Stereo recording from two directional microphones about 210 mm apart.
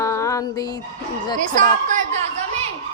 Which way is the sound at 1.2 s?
20° left (ahead or behind).